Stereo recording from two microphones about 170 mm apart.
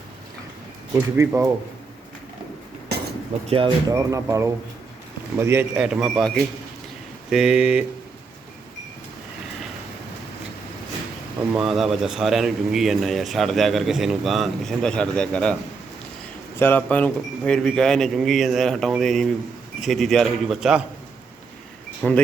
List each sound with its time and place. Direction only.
1.1 s speech: 15° right (ahead or behind)
3.4 s speech: 30° right (ahead or behind)
3.9 s speech: 15° right (ahead or behind)
11.5 s speech: centre (ahead or behind)
16.6 s speech: 10° left (ahead or behind)
22.0 s speech: 5° left (ahead or behind)